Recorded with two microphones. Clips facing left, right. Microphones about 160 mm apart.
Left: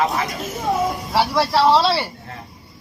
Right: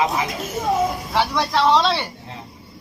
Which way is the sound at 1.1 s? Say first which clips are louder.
Left 3 dB; 5° left (ahead or behind).